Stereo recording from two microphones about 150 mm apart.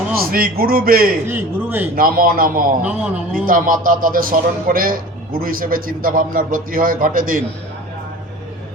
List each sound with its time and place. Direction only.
0.3 s a man's voice: 75° right (ahead or behind)
1.3 s speech: 15° right (ahead or behind)
2.0 s a man's voice: 75° right (ahead or behind)
2.8 s speech: 5° right (ahead or behind)
3.4 s a man's voice: 65° right (ahead or behind)